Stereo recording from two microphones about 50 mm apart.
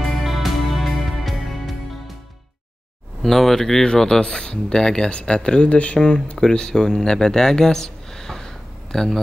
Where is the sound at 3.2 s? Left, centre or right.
Centre.